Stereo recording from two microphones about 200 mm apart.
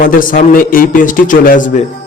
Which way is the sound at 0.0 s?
45° left (ahead or behind).